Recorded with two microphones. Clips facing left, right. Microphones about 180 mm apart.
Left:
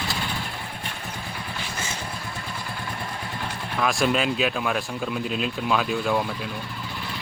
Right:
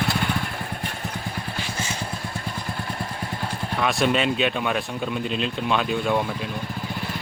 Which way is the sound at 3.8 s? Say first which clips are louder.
Right 1 dB; centre (ahead or behind).